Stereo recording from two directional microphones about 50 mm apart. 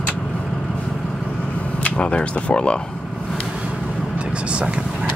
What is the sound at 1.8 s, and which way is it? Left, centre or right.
Speech, left.